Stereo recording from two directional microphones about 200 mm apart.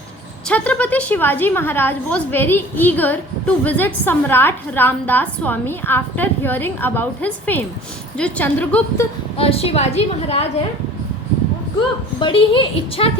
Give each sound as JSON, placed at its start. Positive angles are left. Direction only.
{"t": 0.4, "sound": "a woman's voice", "side_deg": 5}
{"t": 9.4, "sound": "a woman's voice", "side_deg": 30}
{"t": 12.2, "sound": "a woman's voice", "side_deg": 25}